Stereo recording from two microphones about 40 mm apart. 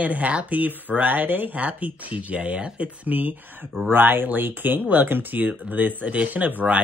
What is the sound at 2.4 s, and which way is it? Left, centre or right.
Speech, right.